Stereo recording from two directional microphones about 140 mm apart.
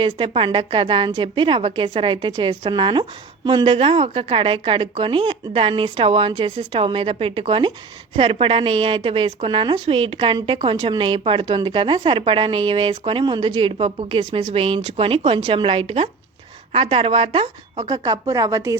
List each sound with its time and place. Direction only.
0.0 s a woman's voice: 40° right (ahead or behind)
17.8 s speech: 30° right (ahead or behind)